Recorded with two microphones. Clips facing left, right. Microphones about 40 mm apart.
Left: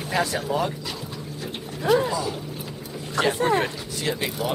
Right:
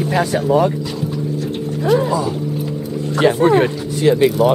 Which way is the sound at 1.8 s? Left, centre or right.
Centre.